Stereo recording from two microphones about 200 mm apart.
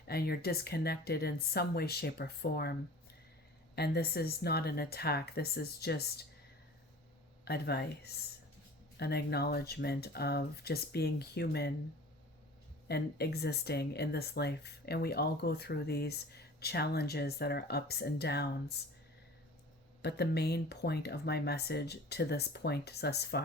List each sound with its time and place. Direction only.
0.1 s speech: 50° left (ahead or behind)
3.8 s speech: 55° left (ahead or behind)
7.4 s speech: 55° left (ahead or behind)
12.9 s speech: 55° left (ahead or behind)
20.0 s speech: 55° left (ahead or behind)